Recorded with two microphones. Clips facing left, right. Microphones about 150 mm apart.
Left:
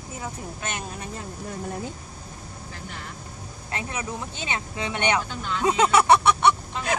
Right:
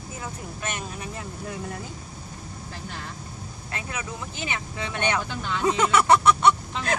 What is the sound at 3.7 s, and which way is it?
Speech, 25° left (ahead or behind).